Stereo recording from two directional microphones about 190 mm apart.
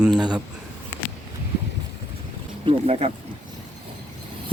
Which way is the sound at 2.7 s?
35° right (ahead or behind).